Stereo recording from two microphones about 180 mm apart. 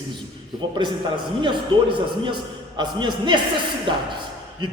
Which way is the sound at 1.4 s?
25° right (ahead or behind).